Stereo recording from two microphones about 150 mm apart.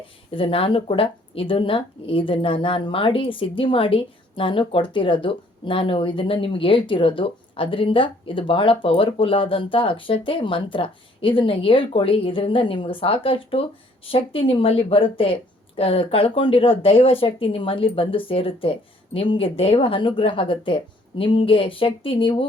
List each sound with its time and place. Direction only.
0.3 s speech: 40° left (ahead or behind)